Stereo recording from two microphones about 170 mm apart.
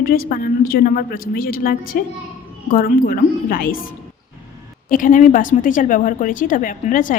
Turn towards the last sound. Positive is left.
turn(degrees=50)  # may be behind; listen again after turning